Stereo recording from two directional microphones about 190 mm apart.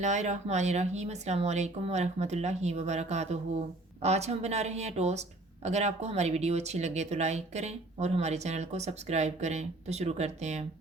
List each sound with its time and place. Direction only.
0.0 s speech: 40° right (ahead or behind)